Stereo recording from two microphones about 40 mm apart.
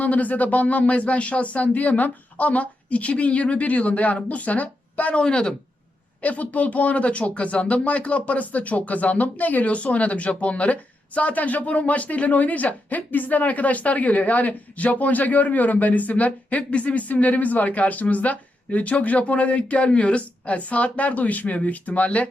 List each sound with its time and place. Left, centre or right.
0.0 s speech: left
5.1 s speech: left
6.2 s speech: left